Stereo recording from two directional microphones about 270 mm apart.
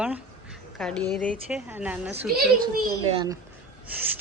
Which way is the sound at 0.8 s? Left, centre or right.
Centre.